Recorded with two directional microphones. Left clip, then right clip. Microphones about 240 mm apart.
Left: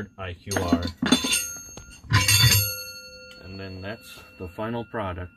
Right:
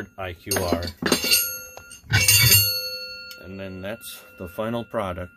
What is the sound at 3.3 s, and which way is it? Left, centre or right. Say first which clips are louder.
Speech: right 3 dB; right.